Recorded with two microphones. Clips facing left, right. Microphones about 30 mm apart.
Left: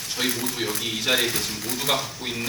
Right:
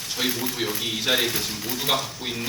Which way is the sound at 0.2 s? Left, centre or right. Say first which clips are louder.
Even; centre.